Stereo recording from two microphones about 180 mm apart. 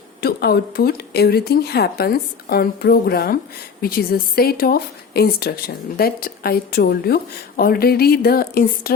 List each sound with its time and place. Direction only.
0.2 s speech: 60° left (ahead or behind)